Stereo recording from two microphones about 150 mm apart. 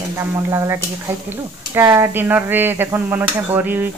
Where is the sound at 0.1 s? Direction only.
20° right (ahead or behind).